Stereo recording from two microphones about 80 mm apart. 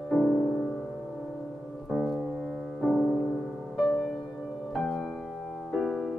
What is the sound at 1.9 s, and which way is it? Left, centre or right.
Piano, centre.